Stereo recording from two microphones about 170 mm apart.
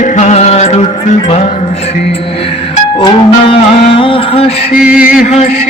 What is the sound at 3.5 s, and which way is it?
Music, 35° left (ahead or behind).